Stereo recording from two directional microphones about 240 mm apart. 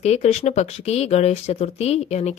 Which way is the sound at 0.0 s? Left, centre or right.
Left.